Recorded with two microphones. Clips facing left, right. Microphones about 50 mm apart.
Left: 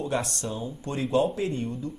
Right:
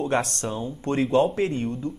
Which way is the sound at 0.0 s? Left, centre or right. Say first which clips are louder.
Right 4 dB; right.